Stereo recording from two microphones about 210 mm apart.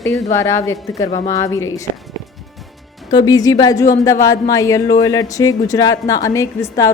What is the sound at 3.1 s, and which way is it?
Speech, 20° left (ahead or behind).